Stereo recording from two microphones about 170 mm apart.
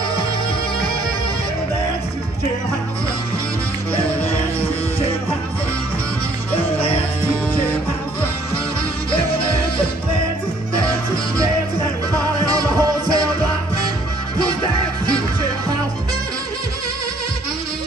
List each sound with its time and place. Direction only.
12.1 s music: 20° right (ahead or behind)